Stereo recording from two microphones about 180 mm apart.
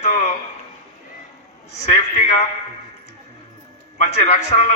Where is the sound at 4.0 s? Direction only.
40° left (ahead or behind).